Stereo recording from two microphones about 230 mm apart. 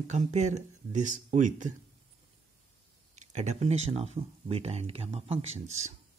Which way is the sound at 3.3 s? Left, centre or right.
Right.